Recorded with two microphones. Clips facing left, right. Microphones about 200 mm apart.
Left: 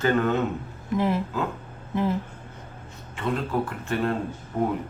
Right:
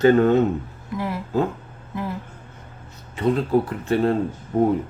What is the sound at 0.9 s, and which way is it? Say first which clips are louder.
Speech: left 4 dB; 20° left (ahead or behind).